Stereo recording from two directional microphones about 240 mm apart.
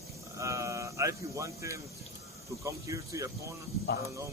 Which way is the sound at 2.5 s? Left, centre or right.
Centre.